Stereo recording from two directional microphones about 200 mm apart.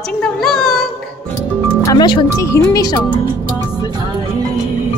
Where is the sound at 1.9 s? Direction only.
20° left (ahead or behind).